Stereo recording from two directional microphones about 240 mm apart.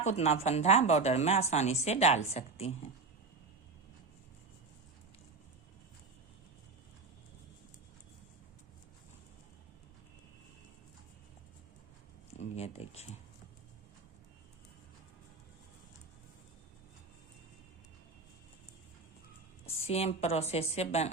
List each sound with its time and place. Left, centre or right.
0.0 s a woman's voice: left
12.5 s a sound: left
19.9 s a woman's voice: left